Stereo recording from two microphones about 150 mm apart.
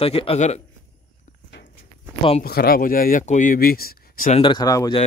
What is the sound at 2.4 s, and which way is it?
Speech, 85° left.